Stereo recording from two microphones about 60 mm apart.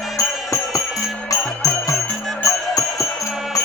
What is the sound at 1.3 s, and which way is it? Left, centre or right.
Music, left.